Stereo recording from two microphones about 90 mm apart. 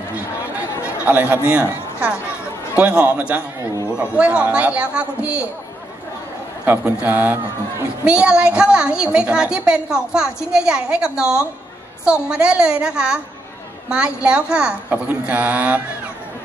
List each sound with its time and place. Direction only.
0.1 s chatter: 15° right (ahead or behind)
2.7 s a woman's voice: 15° right (ahead or behind)
6.8 s a woman's voice: 15° right (ahead or behind)